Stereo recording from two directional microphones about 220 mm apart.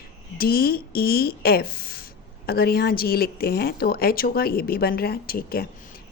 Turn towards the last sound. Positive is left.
turn(degrees=45)  # may be behind; listen again after turning